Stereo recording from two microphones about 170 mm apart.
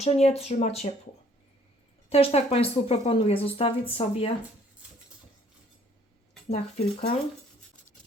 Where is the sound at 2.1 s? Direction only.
35° left (ahead or behind).